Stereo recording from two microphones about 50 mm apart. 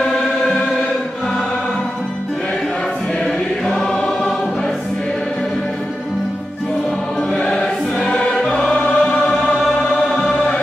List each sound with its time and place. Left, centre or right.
0.0 s choir: centre
3.6 s choir: centre
7.3 s music: centre
9.3 s choir: centre